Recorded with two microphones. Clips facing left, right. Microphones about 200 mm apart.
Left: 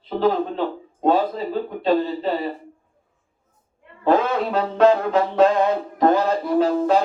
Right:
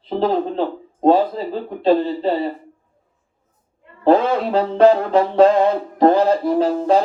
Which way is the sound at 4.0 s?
30° right (ahead or behind).